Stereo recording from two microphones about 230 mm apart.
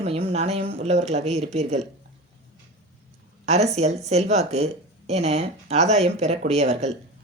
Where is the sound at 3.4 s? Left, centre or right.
Right.